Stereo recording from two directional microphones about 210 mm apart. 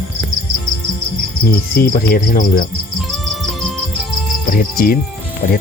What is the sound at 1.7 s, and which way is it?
Speech, 45° left (ahead or behind).